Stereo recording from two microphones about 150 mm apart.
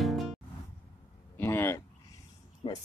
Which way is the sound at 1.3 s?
15° left (ahead or behind).